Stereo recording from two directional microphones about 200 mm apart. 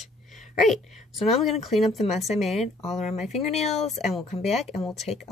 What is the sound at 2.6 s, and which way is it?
Speech, 35° left (ahead or behind).